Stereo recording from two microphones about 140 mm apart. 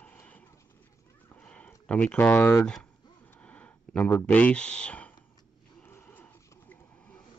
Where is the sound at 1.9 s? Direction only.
10° left (ahead or behind).